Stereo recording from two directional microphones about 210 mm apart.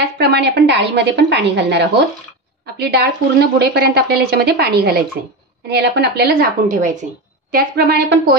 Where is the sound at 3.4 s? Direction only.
50° right (ahead or behind).